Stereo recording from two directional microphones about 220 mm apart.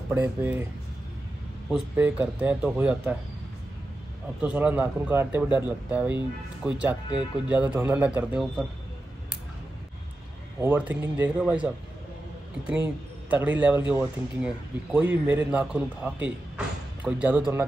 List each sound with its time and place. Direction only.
0.1 s speech: 5° right (ahead or behind)
1.7 s speech: 5° right (ahead or behind)
4.4 s a man's voice: 5° right (ahead or behind)
10.6 s a man's voice: 10° right (ahead or behind)